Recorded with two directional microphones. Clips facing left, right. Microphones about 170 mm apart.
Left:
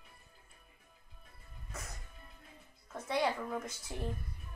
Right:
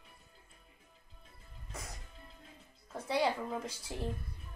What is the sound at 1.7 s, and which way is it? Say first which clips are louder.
Music: right 1 dB; 30° right (ahead or behind).